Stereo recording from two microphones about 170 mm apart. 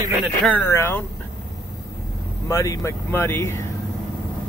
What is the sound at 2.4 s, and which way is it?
Speech, 20° left (ahead or behind).